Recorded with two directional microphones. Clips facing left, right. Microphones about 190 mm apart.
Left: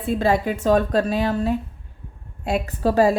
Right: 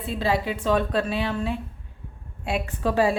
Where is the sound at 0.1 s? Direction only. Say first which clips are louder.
Left 5 dB; 50° left (ahead or behind).